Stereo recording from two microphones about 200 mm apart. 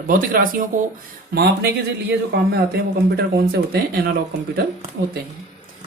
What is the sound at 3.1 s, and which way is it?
Speech, 50° right (ahead or behind).